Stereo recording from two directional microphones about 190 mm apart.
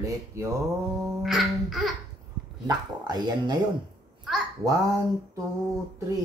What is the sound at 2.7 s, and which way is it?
Speech, 20° right (ahead or behind).